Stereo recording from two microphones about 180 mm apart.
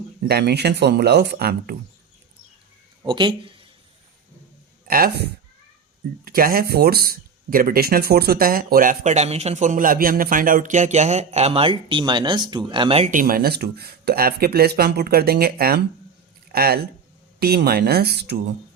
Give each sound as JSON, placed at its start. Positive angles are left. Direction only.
{"t": 0.3, "sound": "speech", "side_deg": -65}
{"t": 3.1, "sound": "speech", "side_deg": -25}
{"t": 4.9, "sound": "speech", "side_deg": -55}
{"t": 13.1, "sound": "speech", "side_deg": -50}